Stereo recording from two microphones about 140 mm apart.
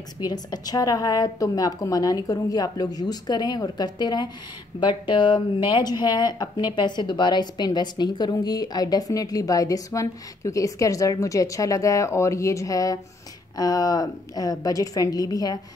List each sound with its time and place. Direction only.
0.2 s speech: 30° left (ahead or behind)